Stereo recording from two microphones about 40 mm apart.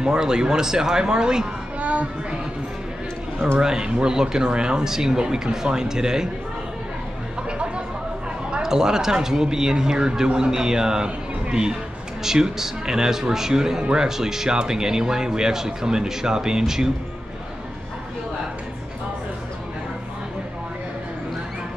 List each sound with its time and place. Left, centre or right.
0.0 s speech: centre
1.8 s a sound: right
3.5 s speech: centre
7.4 s chatter: right
8.6 s speech: centre
12.2 s speech: centre